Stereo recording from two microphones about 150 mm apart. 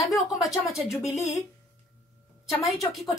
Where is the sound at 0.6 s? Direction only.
Centre (ahead or behind).